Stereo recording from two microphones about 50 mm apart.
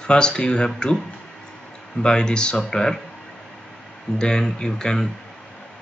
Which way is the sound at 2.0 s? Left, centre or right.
Centre.